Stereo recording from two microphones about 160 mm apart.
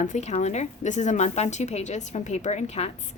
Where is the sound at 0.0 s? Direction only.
50° left (ahead or behind).